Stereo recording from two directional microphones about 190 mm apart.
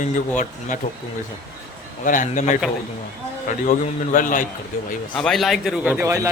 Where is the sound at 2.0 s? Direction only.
45° left (ahead or behind).